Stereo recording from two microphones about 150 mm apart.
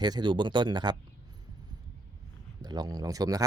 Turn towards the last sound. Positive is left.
turn(degrees=-25)  # may be behind; listen again after turning